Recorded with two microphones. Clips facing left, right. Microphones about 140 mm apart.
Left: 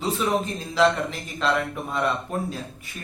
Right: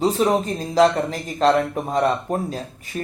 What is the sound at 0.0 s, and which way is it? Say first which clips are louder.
Speech: right 6 dB; 40° right (ahead or behind).